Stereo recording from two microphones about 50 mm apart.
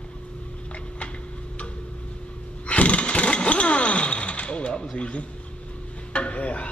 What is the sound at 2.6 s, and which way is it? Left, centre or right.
Vehicle, left.